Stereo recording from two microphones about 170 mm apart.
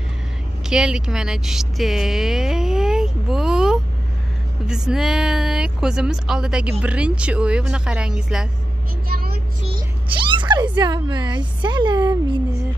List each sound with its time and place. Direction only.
0.7 s speech: 5° right (ahead or behind)
9.1 s vehicle: 65° right (ahead or behind)
9.7 s speech: 30° right (ahead or behind)